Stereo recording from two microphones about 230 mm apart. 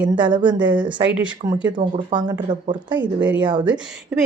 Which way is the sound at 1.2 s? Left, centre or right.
Centre.